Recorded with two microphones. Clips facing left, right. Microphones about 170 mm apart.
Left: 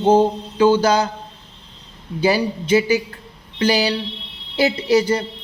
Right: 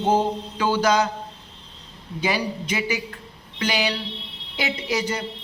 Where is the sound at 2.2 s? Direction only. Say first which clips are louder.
Left 7 dB; 30° left (ahead or behind).